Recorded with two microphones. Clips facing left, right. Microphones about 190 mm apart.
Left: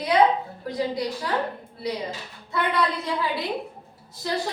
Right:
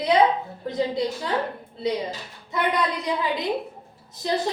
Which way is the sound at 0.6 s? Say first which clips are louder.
Right 3 dB; 25° right (ahead or behind).